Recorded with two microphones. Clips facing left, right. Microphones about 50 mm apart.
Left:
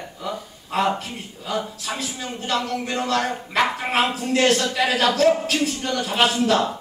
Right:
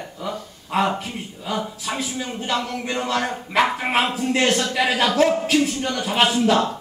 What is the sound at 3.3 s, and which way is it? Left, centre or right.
A man's voice, centre.